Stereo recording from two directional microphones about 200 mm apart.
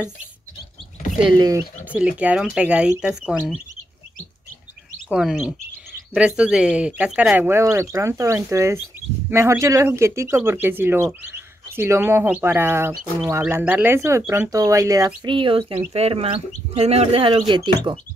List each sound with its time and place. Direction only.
1.9 s speech: 5° right (ahead or behind)
5.1 s speech: centre (ahead or behind); by 17.9 s 20° right (ahead or behind)